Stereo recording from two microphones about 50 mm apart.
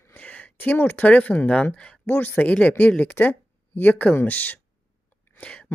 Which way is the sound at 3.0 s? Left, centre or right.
Left.